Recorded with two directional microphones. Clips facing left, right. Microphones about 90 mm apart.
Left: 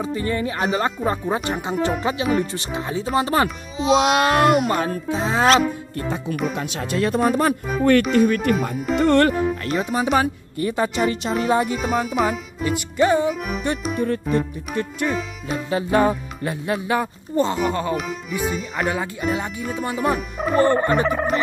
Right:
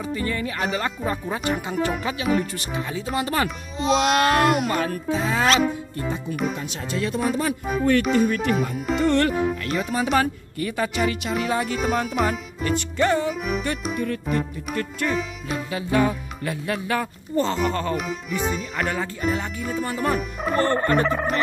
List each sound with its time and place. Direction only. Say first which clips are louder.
0.0 s speech: left 3 dB; 25° left (ahead or behind)
3.4 s speech: left 3 dB; centre (ahead or behind)
4.6 s speech: left 2 dB; 35° left (ahead or behind)
6.5 s speech: left 4 dB; 65° left (ahead or behind); by 9.8 s 50° left (ahead or behind)
9.8 s speech: left 2 dB; 25° left (ahead or behind)
11.7 s speech: left 2 dB; centre (ahead or behind)
13.3 s music: even; centre (ahead or behind)
13.9 s music: left 5 dB; 35° left (ahead or behind)
15.0 s music: left 1 dB; centre (ahead or behind)
15.5 s music: left 3 dB; 35° left (ahead or behind)
16.6 s speech: left 4 dB; 20° left (ahead or behind); by 20.5 s centre (ahead or behind)
20.5 s speech: left 3 dB; 15° left (ahead or behind)